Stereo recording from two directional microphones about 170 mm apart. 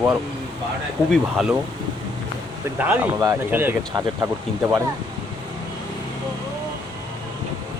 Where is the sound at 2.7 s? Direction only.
10° right (ahead or behind).